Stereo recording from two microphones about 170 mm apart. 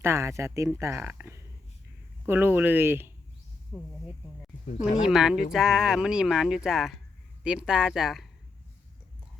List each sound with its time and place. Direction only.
0.0 s speech: 15° right (ahead or behind)
5.0 s speech: 5° right (ahead or behind)